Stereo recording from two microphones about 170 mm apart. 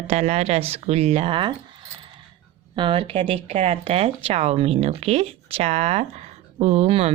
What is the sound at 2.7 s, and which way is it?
Speech, 30° right (ahead or behind).